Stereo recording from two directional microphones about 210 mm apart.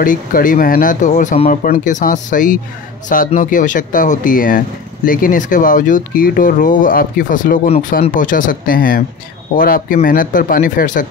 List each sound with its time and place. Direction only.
0.0 s speech: 40° left (ahead or behind)